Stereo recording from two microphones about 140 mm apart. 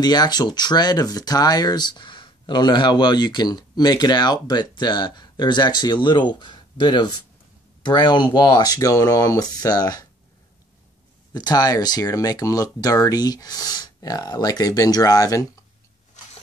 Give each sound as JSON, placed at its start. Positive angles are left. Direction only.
{"t": 0.0, "sound": "speech", "side_deg": 30}
{"t": 11.3, "sound": "speech", "side_deg": 30}